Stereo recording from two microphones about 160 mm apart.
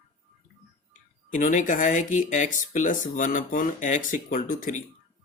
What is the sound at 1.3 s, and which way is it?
Speech, 55° left (ahead or behind).